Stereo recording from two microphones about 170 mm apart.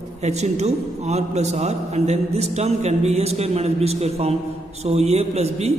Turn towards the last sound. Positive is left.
turn(degrees=-40)  # may be behind; listen again after turning